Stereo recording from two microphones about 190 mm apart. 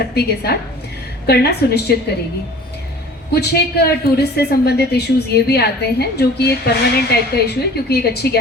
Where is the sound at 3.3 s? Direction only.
60° left (ahead or behind).